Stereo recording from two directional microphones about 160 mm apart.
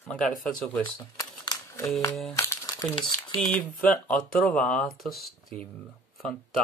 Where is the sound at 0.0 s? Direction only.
5° left (ahead or behind).